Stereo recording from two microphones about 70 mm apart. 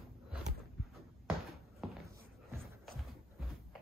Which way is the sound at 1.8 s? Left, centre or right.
Centre.